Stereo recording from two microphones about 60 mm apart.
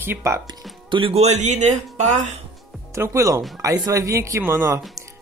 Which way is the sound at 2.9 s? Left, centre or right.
Right.